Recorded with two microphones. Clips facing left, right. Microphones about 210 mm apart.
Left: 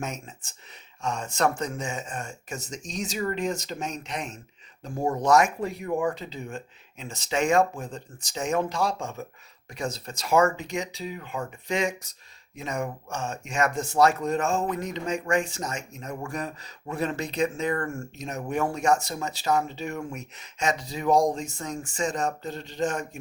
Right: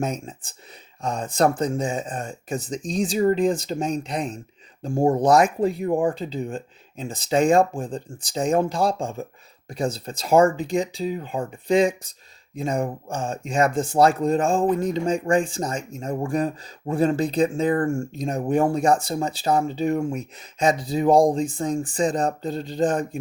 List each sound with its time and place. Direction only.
0.0 s speech: 35° right (ahead or behind)